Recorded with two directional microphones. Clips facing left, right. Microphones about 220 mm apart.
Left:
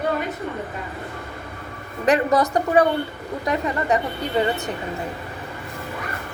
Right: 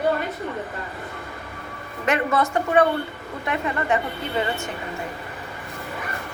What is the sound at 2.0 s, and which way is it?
A woman's voice, 35° left (ahead or behind).